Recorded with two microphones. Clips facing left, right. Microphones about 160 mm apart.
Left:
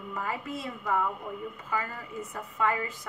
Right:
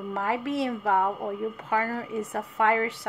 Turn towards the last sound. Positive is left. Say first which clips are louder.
# right 5 dB
turn(degrees=-75)  # may be behind; listen again after turning